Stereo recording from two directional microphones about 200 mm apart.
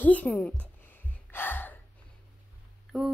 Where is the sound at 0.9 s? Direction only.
10° left (ahead or behind).